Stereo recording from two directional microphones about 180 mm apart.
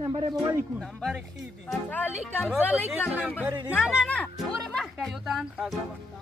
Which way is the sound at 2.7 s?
10° left (ahead or behind).